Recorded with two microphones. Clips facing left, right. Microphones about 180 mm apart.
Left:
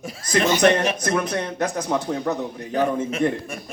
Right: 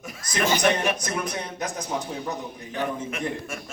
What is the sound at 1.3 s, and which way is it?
Speech, 65° left (ahead or behind).